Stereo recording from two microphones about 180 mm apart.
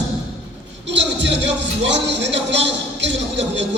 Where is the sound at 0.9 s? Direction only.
80° right.